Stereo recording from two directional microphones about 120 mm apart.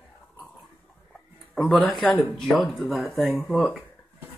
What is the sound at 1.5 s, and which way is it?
Speech, 10° left (ahead or behind).